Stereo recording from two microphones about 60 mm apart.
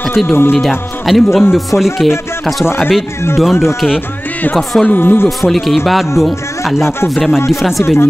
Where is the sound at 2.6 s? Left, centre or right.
Left.